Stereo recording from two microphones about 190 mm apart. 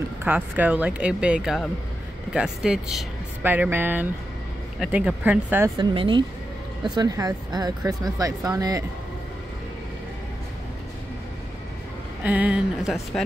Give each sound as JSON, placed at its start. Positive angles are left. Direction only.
{"t": 0.2, "sound": "speech", "side_deg": -10}
{"t": 5.8, "sound": "speech", "side_deg": -25}
{"t": 12.2, "sound": "speech", "side_deg": -10}